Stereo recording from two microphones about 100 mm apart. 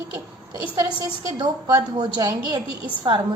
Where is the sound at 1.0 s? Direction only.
45° right (ahead or behind).